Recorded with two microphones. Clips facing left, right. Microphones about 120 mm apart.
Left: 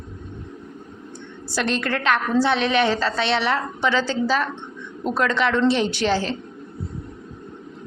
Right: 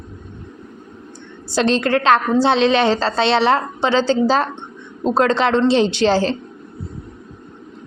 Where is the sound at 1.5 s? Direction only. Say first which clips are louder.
Right 7 dB; 25° right (ahead or behind).